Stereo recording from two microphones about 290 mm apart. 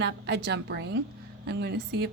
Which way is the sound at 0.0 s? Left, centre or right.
Right.